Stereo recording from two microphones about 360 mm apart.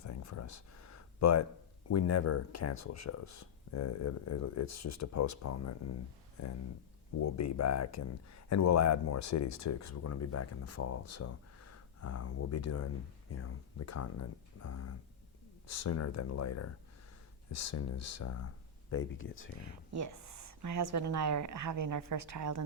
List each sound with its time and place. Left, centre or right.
0.0 s a sound: left
1.9 s speech: left
7.2 s speech: left
20.1 s a woman's voice: right